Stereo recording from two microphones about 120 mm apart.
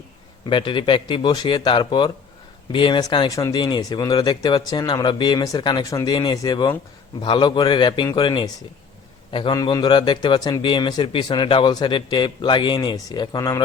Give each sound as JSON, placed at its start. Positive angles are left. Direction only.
{"t": 0.4, "sound": "a man's voice", "side_deg": 40}
{"t": 3.2, "sound": "a man's voice", "side_deg": 30}
{"t": 9.3, "sound": "a man's voice", "side_deg": 45}